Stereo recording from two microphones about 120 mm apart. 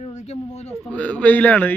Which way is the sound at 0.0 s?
65° left (ahead or behind).